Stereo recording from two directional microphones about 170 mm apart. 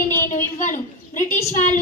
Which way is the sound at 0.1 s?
15° left (ahead or behind).